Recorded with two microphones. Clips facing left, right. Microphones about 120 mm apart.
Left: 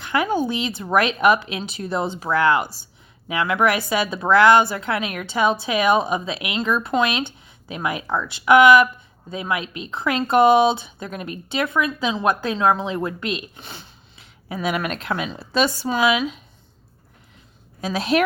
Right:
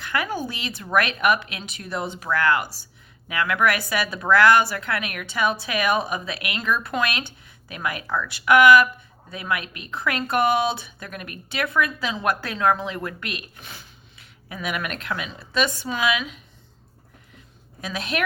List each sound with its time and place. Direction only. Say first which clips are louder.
0.0 s speech: left 6 dB; 25° left (ahead or behind)
17.7 s a woman's voice: left 7 dB; 30° left (ahead or behind)